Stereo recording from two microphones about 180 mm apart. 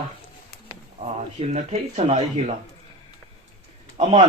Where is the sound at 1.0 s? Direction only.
35° right (ahead or behind).